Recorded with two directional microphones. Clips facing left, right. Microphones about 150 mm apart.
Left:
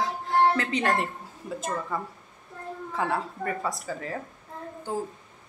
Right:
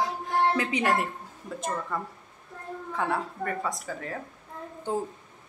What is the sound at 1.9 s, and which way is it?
Speech, 5° left (ahead or behind).